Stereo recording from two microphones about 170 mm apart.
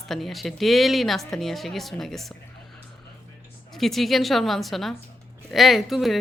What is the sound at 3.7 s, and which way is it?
Speech, centre (ahead or behind).